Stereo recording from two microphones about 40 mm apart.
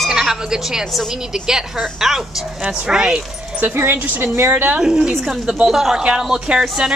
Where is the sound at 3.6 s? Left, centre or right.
Right.